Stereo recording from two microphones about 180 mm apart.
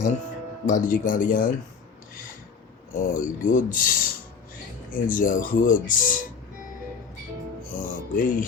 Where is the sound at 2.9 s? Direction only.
50° left (ahead or behind).